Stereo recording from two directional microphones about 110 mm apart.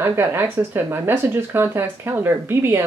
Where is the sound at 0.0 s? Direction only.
20° right (ahead or behind).